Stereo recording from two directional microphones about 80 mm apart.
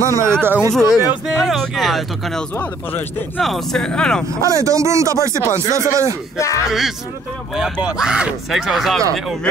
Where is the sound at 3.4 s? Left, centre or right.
Centre.